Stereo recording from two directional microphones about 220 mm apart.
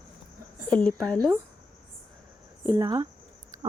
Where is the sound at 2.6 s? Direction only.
20° right (ahead or behind).